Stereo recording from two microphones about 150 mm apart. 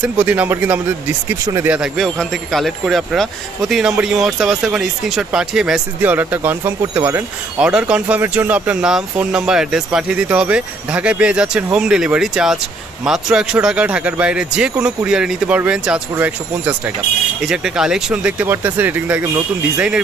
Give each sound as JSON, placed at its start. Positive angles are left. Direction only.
{"t": 0.0, "sound": "speech", "side_deg": -10}
{"t": 1.4, "sound": "speech", "side_deg": -20}
{"t": 1.7, "sound": "speech", "side_deg": -5}